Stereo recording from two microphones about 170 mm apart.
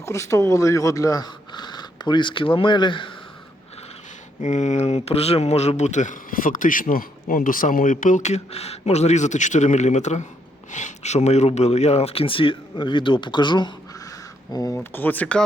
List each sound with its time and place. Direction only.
0.0 s speech: 15° left (ahead or behind)
4.4 s speech: 45° left (ahead or behind); by 14.8 s 20° left (ahead or behind)
14.8 s speech: 10° left (ahead or behind)